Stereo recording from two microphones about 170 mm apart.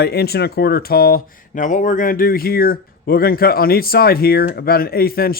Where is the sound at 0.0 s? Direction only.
70° left (ahead or behind).